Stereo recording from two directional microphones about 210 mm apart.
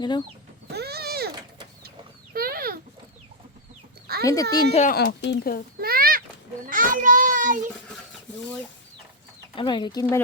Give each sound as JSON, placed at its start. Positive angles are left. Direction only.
{"t": 0.0, "sound": "speech", "side_deg": 20}
{"t": 0.7, "sound": "a sound", "side_deg": -50}
{"t": 2.3, "sound": "a sound", "side_deg": -45}
{"t": 4.2, "sound": "speech", "side_deg": 15}
{"t": 4.7, "sound": "a child's voice", "side_deg": 35}
{"t": 4.9, "sound": "speech", "side_deg": 50}
{"t": 5.8, "sound": "a sound", "side_deg": -45}
{"t": 6.7, "sound": "a child's voice", "side_deg": -40}
{"t": 9.6, "sound": "speech", "side_deg": 20}